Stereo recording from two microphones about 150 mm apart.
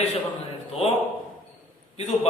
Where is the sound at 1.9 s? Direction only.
45° left (ahead or behind).